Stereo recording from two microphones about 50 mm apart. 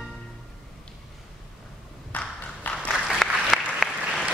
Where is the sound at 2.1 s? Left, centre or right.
Left.